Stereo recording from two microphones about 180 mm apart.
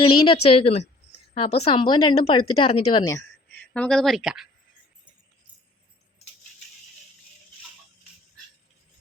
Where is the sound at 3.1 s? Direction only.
15° left (ahead or behind); by 4.4 s 5° right (ahead or behind).